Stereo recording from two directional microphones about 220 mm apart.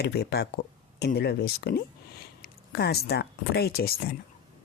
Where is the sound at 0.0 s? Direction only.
45° left (ahead or behind).